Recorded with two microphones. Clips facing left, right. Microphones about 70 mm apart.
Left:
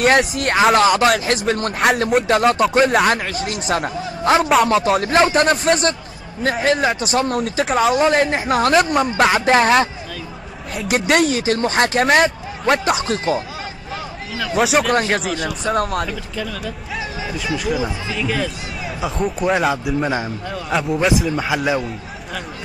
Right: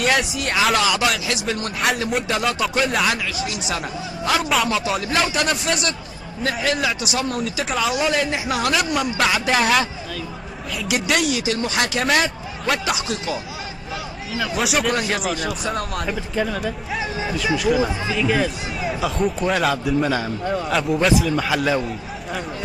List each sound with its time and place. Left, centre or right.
0.0 s a man's voice: left
10.7 s a man's voice: left
14.6 s speech: centre
15.0 s a man's voice: left
16.1 s speech: right
18.9 s a man's voice: centre
20.0 s a man's voice: left
20.7 s a man's voice: centre